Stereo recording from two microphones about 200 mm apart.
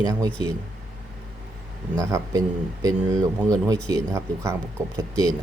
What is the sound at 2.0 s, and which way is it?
Speech, 15° right (ahead or behind).